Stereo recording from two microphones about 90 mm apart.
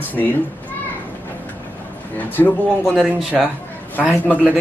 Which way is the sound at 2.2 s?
20° left (ahead or behind).